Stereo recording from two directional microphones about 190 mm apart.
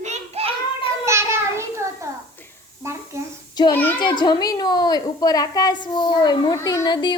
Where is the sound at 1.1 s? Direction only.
15° right (ahead or behind).